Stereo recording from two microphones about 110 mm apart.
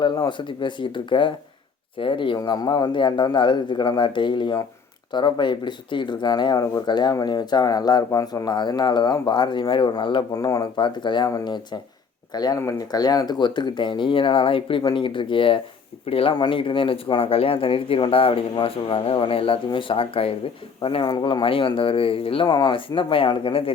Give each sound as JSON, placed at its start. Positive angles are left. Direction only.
{"t": 0.3, "sound": "speech", "side_deg": 45}
{"t": 10.3, "sound": "speech", "side_deg": 35}
{"t": 16.3, "sound": "speech", "side_deg": 45}
{"t": 21.1, "sound": "speech", "side_deg": 40}
{"t": 22.4, "sound": "speech", "side_deg": 40}